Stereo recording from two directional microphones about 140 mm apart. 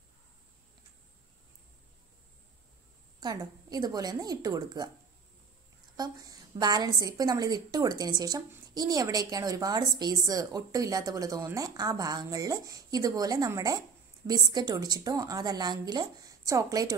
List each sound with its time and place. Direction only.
3.2 s a woman's voice: 30° right (ahead or behind)
5.9 s a woman's voice: 30° right (ahead or behind)